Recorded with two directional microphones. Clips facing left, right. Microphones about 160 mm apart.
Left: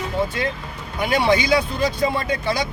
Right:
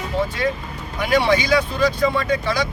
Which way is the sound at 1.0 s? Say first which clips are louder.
Right 1 dB; 25° left (ahead or behind).